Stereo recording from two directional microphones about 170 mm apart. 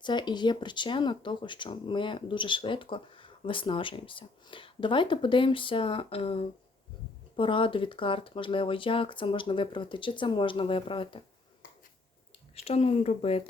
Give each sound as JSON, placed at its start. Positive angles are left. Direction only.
{"t": 0.0, "sound": "speech", "side_deg": 25}
{"t": 12.5, "sound": "speech", "side_deg": 35}